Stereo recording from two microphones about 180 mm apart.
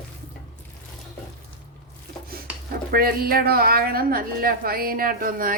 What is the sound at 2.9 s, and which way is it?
A woman's voice, 55° right (ahead or behind).